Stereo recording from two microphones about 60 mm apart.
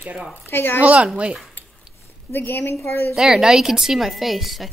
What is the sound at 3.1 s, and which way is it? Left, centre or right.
A woman's voice, centre.